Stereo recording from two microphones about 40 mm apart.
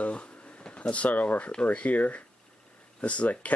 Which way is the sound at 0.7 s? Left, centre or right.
Left.